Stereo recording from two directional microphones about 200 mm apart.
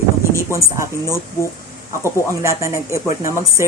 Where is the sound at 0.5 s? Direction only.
15° right (ahead or behind).